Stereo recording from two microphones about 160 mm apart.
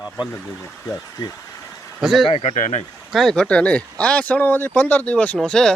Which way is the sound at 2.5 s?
50° left (ahead or behind).